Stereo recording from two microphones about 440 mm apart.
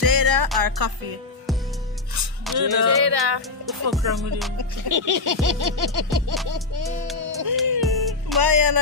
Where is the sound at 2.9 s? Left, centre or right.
Right.